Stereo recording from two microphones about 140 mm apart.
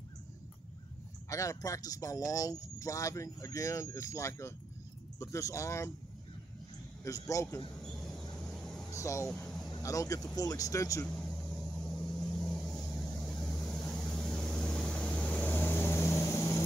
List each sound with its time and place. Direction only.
1.3 s speech: 25° left (ahead or behind)
7.1 s speech: 25° left (ahead or behind)
7.8 s a sound: 5° left (ahead or behind)
8.9 s speech: 20° left (ahead or behind)
9.3 s a sound: 5° left (ahead or behind)
9.7 s speech: 25° left (ahead or behind)
11.1 s vehicle: 5° left (ahead or behind); by 16.6 s 20° left (ahead or behind)